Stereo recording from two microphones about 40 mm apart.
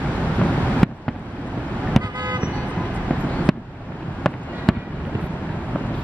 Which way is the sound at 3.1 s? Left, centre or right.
Left.